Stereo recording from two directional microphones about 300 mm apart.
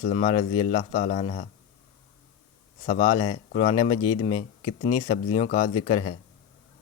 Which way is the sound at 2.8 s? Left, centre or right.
Centre.